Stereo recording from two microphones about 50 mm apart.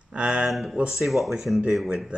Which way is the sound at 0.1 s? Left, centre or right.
Right.